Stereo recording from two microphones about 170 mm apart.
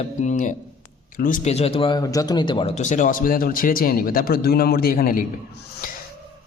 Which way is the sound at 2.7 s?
45° left (ahead or behind).